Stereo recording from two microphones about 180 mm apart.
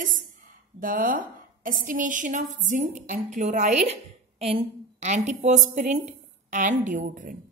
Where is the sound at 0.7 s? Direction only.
50° right (ahead or behind).